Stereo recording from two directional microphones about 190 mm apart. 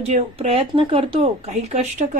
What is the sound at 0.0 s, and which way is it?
Speech, 35° right (ahead or behind).